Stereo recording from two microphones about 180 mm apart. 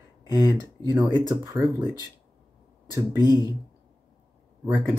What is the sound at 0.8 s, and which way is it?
Speech, 20° right (ahead or behind).